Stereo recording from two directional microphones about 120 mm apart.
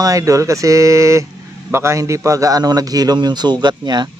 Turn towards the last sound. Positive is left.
turn(degrees=-35)  # may be behind; listen again after turning